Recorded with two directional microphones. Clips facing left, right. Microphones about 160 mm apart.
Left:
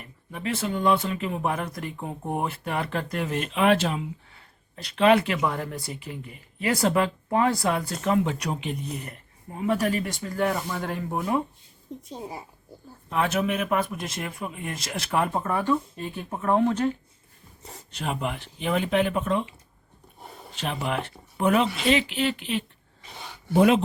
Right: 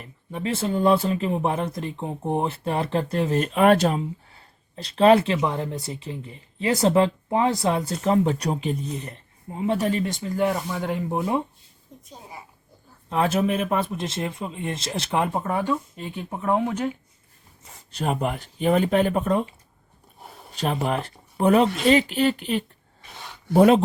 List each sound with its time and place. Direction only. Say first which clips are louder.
0.0 s speech: right 3 dB; 30° right (ahead or behind)
13.1 s speech: right 3 dB; 30° right (ahead or behind); by 17.0 s 10° right (ahead or behind)
17.9 s speech: right 4 dB; 40° right (ahead or behind)
20.6 s speech: right 4 dB; 40° right (ahead or behind)